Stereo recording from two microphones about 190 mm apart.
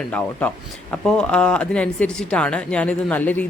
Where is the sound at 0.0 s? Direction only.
10° left (ahead or behind).